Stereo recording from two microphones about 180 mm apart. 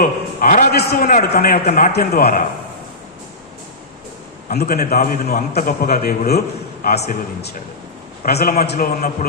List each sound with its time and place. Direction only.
0.0 s a man's voice: 50° left (ahead or behind)
4.4 s a man's voice: 55° left (ahead or behind)
8.2 s a man's voice: 60° left (ahead or behind)